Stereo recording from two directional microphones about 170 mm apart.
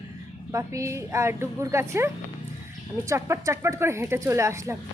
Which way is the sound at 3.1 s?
15° right (ahead or behind).